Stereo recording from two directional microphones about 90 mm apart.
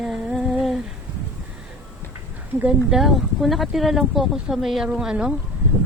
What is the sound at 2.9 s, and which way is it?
Speech, centre (ahead or behind).